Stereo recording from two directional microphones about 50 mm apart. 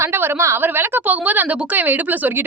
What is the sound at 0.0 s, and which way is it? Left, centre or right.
Speech, right.